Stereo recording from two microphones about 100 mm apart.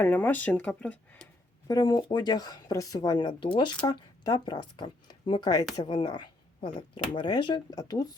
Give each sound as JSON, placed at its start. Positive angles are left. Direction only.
{"t": 0.0, "sound": "speech", "side_deg": 20}
{"t": 1.6, "sound": "speech", "side_deg": 40}
{"t": 3.8, "sound": "speech", "side_deg": 40}
{"t": 7.8, "sound": "speech", "side_deg": 40}